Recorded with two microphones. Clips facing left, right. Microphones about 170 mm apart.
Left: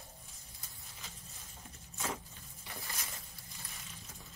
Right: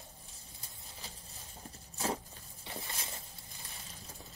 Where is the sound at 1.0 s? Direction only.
35° right (ahead or behind).